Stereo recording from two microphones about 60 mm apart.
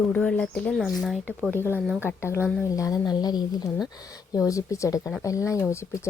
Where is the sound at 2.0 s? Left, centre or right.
Left.